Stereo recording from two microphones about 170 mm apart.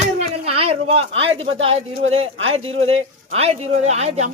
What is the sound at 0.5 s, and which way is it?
Speech, 35° right (ahead or behind).